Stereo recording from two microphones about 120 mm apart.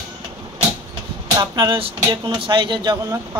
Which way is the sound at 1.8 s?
50° right (ahead or behind).